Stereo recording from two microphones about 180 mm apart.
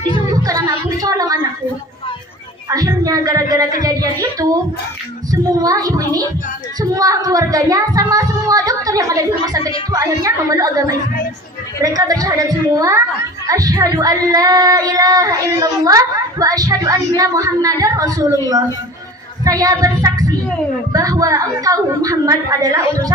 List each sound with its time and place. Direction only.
0.4 s a sound: 20° right (ahead or behind)
2.6 s speech: 20° right (ahead or behind)
19.5 s speech: 20° right (ahead or behind)